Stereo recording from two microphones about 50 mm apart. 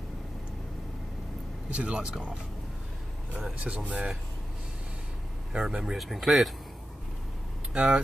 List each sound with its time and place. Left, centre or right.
1.7 s speech: right
3.6 s speech: right
5.5 s speech: centre
5.9 s speech: centre
7.7 s speech: right